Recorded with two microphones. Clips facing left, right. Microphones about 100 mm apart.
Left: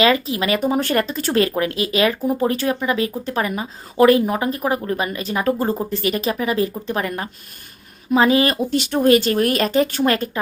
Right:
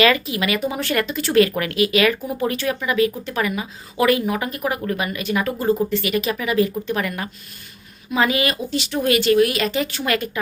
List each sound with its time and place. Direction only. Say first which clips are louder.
0.0 s speech: left 1 dB; 30° left (ahead or behind)
8.7 s speech: left 6 dB; 50° left (ahead or behind)